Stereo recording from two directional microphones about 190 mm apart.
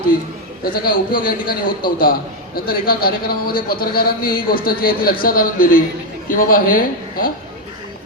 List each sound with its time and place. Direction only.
0.6 s speech: 50° left (ahead or behind)